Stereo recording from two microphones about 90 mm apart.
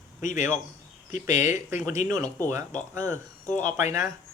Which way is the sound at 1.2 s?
25° right (ahead or behind).